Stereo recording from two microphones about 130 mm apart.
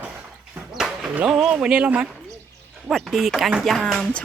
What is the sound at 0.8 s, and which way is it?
Speech, 5° right (ahead or behind).